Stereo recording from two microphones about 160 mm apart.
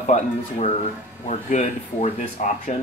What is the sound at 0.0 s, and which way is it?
Speech, 45° left (ahead or behind).